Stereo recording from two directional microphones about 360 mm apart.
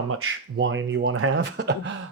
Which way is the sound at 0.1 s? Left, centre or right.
Right.